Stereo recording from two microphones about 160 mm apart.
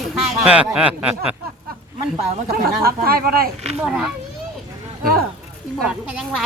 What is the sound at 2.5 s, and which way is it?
Speech, 70° right (ahead or behind).